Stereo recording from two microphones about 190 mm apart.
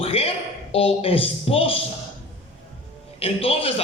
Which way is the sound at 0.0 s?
30° left (ahead or behind).